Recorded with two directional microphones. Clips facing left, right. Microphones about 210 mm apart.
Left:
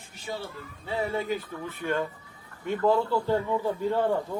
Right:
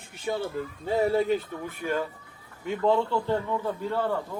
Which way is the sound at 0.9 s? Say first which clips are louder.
Right 5 dB; 40° right (ahead or behind).